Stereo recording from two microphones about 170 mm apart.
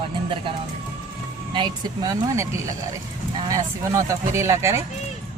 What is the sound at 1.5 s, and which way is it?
Speech, 25° right (ahead or behind).